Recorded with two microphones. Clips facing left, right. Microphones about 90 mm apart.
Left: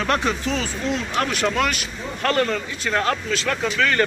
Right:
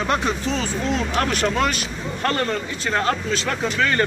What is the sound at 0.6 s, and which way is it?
A man's voice, 35° right (ahead or behind).